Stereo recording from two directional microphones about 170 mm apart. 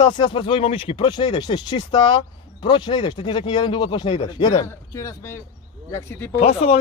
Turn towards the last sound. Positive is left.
turn(degrees=40)  # may be behind; listen again after turning